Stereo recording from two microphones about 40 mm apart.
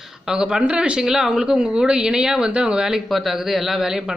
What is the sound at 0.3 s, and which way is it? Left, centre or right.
Speech, centre.